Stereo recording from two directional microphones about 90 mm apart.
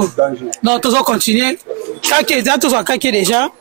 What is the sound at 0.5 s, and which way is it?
Speech, 10° right (ahead or behind).